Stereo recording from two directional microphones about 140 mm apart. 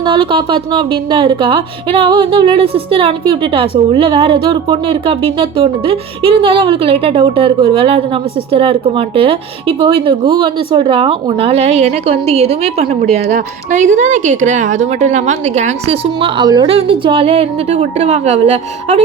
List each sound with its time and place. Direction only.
0.0 s a woman's voice: 35° right (ahead or behind)
13.3 s a woman's voice: 65° right (ahead or behind)
16.0 s a woman's voice: 35° right (ahead or behind)
16.6 s a woman's voice: 45° right (ahead or behind)